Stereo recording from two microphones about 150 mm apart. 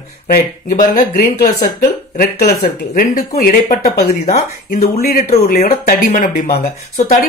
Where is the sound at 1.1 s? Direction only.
90° left.